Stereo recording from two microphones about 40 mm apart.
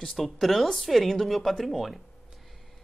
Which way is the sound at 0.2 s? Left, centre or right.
Centre.